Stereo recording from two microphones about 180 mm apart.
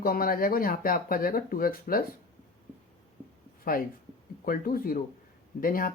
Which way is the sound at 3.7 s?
50° left (ahead or behind).